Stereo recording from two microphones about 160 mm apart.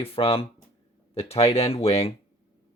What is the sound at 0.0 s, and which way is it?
Speech, 35° left (ahead or behind).